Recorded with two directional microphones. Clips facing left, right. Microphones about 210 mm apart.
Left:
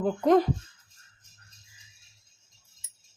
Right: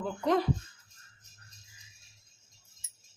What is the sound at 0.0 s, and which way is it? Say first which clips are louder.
Speech: left 7 dB; 45° left (ahead or behind).